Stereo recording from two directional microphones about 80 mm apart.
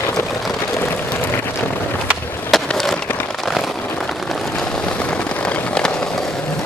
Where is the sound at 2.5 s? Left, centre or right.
Centre.